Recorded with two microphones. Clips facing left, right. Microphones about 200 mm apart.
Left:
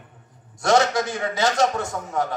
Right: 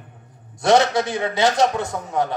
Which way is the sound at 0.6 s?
60° right (ahead or behind).